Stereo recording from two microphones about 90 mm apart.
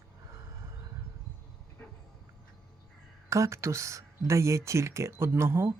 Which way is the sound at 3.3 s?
35° right (ahead or behind).